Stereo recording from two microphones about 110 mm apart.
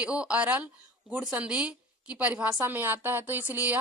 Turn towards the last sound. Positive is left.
turn(degrees=-15)  # may be behind; listen again after turning